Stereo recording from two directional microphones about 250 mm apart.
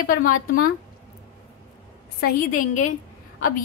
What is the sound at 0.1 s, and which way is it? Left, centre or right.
Speech, left.